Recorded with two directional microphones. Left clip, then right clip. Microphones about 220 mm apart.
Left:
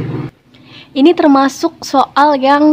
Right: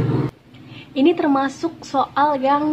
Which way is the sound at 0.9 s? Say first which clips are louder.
Left 8 dB; 45° left (ahead or behind).